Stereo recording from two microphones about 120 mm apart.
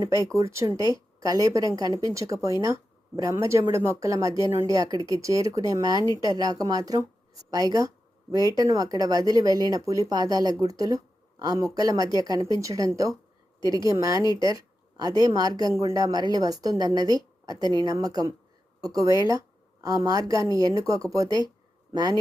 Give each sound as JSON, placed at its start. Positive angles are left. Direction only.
{"t": 0.3, "sound": "a woman's voice", "side_deg": -25}
{"t": 13.6, "sound": "a woman's voice", "side_deg": 40}
{"t": 14.0, "sound": "a woman's voice", "side_deg": -30}
{"t": 19.8, "sound": "a woman's voice", "side_deg": -30}